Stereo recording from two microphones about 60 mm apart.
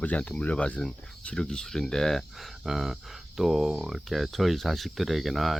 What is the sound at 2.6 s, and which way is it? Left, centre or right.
Speech, centre.